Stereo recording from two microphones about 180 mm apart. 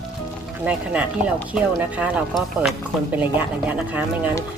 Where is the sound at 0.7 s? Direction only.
5° right (ahead or behind).